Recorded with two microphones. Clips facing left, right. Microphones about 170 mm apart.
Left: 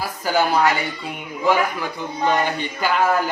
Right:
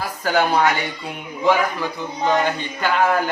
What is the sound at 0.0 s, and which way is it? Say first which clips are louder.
Speech: right 1 dB; 5° left (ahead or behind).